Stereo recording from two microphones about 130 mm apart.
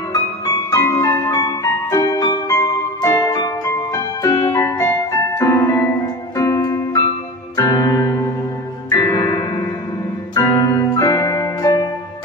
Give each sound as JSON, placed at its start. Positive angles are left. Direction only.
{"t": 0.7, "sound": "music", "side_deg": 25}